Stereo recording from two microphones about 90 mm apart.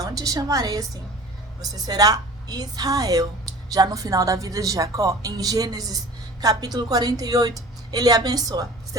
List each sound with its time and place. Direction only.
0.0 s a woman's voice: 40° right (ahead or behind)